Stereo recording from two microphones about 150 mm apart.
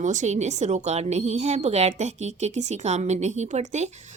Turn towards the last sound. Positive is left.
turn(degrees=-50)  # may be behind; listen again after turning